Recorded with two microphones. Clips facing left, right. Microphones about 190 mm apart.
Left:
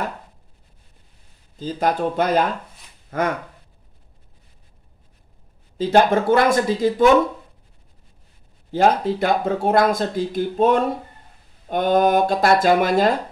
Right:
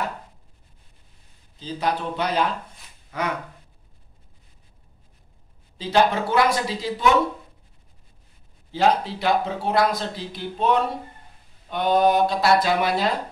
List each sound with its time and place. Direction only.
1.6 s speech: 45° left (ahead or behind)
5.8 s speech: 50° left (ahead or behind)
8.7 s speech: 50° left (ahead or behind)